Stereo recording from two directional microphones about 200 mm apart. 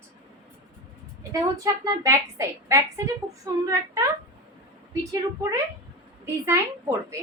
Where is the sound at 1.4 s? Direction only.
15° right (ahead or behind).